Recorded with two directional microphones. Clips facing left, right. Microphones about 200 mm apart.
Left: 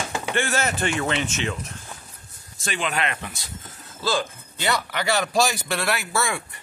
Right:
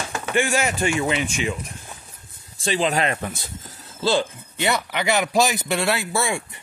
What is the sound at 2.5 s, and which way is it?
Speech, 30° right (ahead or behind).